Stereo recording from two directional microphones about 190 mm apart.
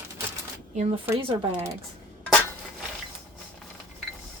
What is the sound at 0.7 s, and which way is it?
Speech, 35° right (ahead or behind).